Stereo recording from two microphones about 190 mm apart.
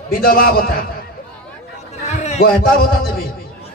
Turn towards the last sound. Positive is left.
turn(degrees=50)  # may be behind; listen again after turning